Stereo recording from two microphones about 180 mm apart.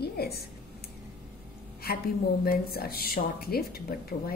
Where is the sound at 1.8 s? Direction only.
60° left (ahead or behind).